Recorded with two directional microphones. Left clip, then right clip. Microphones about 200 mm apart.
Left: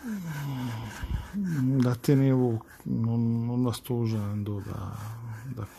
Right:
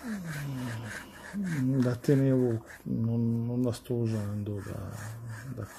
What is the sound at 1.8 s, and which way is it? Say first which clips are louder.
Speech: left 1 dB; 30° left (ahead or behind).